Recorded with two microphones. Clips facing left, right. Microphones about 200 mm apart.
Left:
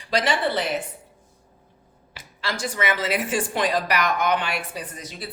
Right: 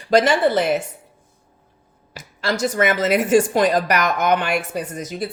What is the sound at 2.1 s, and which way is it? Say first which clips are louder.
Speech: right 7 dB; 45° right (ahead or behind).